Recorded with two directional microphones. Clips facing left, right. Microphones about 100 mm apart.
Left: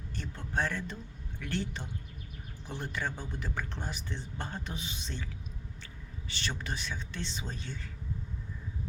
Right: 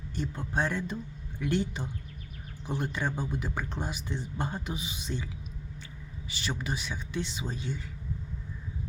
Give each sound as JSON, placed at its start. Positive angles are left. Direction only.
{"t": 0.2, "sound": "speech", "side_deg": -15}
{"t": 6.2, "sound": "speech", "side_deg": -10}